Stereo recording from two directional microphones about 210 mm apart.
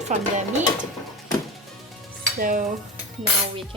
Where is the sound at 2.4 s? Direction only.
40° right (ahead or behind).